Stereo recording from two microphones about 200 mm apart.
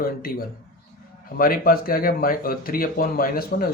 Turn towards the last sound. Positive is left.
turn(degrees=45)  # may be behind; listen again after turning